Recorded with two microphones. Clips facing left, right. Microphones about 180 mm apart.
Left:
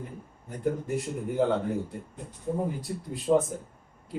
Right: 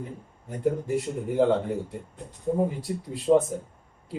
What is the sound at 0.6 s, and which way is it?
Speech, centre (ahead or behind).